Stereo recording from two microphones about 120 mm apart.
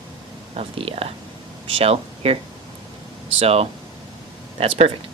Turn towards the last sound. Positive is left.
turn(degrees=-60)  # may be behind; listen again after turning